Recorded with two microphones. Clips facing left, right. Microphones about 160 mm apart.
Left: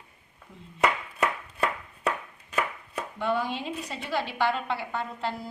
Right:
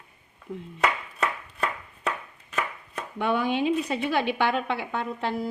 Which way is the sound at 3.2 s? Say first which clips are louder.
Right 4 dB; 60° right (ahead or behind).